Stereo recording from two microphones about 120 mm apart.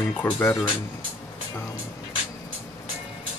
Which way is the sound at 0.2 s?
20° left (ahead or behind).